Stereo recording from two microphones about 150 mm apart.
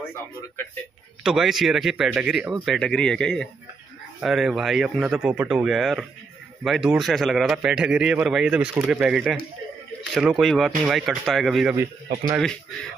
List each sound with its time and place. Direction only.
0.0 s speech: 15° left (ahead or behind)
1.2 s a man's voice: centre (ahead or behind)